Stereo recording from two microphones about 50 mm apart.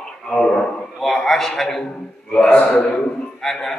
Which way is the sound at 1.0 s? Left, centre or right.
Centre.